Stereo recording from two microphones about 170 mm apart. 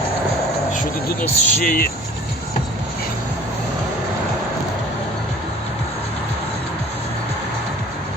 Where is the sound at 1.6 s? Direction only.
55° left (ahead or behind).